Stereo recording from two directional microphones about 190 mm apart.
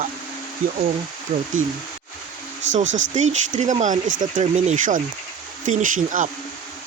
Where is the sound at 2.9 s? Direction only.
85° right.